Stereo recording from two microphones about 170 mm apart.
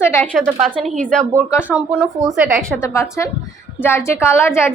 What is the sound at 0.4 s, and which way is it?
Speech, 10° right (ahead or behind).